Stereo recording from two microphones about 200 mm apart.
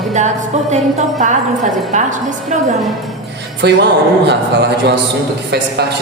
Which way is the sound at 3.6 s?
60° right (ahead or behind).